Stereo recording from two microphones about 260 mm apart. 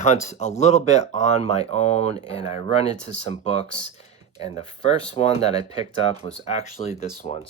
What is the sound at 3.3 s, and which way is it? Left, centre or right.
Speech, left.